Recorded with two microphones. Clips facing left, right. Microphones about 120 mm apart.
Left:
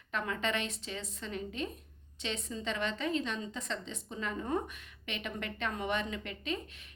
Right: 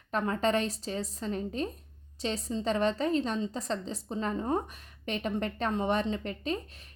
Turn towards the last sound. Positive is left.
turn(degrees=-40)  # may be behind; listen again after turning